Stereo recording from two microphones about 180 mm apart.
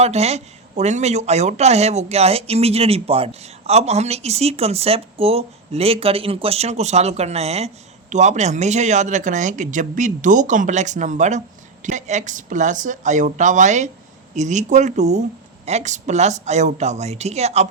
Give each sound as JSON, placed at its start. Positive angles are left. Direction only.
{"t": 0.0, "sound": "speech", "side_deg": -35}